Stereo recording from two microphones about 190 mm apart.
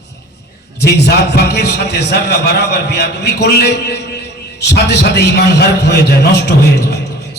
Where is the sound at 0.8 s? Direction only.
60° left (ahead or behind).